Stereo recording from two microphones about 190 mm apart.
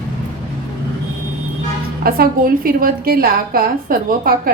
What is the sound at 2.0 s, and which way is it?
A woman's voice, 50° right (ahead or behind).